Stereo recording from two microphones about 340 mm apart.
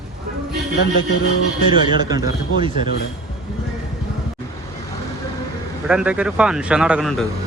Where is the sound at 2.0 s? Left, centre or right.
Centre.